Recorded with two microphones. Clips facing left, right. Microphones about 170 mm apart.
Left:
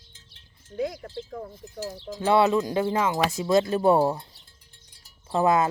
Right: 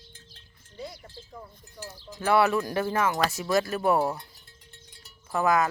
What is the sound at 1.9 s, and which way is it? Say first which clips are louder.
Cowbell: left 9 dB; 65° left (ahead or behind).